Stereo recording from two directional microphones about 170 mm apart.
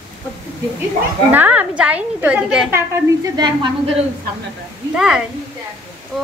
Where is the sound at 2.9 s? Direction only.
25° right (ahead or behind).